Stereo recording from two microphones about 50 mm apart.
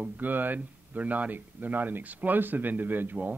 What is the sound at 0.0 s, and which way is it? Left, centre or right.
Speech, right.